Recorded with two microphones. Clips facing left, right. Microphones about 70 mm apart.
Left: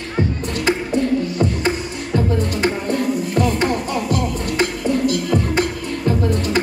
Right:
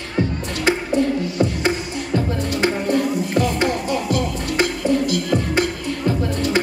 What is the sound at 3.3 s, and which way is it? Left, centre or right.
Music, left.